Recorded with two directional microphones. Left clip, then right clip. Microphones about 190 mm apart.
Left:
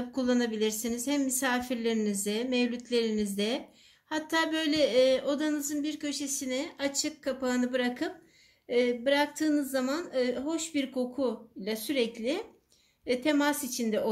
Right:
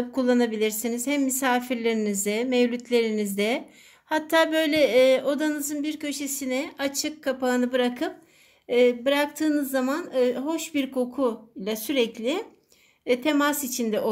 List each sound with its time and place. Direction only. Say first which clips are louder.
0.1 s speech: right 6 dB; 35° right (ahead or behind)